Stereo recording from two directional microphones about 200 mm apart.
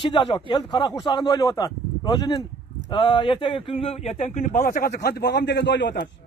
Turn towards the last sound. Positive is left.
turn(degrees=60)  # may be behind; listen again after turning